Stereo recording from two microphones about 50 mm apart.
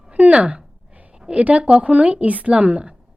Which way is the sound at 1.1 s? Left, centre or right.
Centre.